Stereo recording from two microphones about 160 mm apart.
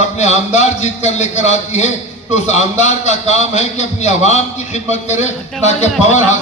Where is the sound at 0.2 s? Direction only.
45° left (ahead or behind).